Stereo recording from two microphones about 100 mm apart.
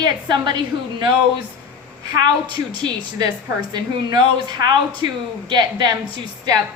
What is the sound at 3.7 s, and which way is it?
A woman's voice, 45° right (ahead or behind).